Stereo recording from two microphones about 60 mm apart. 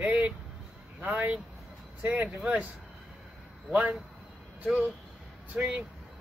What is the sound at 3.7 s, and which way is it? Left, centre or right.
Speech, right.